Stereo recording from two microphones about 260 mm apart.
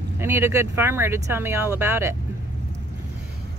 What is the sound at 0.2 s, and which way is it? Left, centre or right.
Speech, centre.